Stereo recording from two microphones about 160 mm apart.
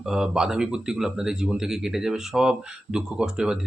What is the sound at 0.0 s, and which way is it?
Speech, 5° right (ahead or behind).